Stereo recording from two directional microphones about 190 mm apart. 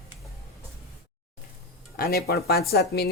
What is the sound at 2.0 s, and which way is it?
Speech, 55° left (ahead or behind).